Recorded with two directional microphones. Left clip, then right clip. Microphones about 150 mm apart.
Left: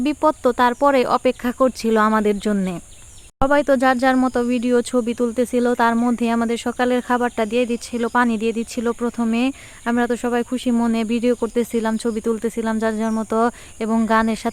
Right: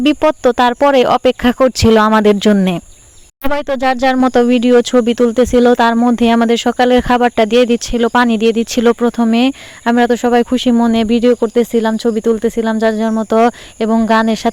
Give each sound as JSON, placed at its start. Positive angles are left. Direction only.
{"t": 0.0, "sound": "speech", "side_deg": -55}